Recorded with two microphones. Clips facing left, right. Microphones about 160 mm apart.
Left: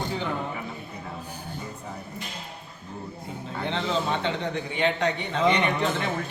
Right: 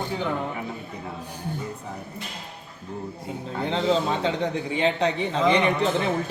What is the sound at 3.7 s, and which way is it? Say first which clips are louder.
A man's voice: right 4 dB; 35° right (ahead or behind).